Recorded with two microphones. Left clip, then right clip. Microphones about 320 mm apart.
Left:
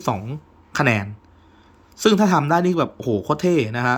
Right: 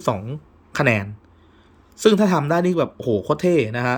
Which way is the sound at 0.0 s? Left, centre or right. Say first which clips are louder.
Right 1 dB; centre.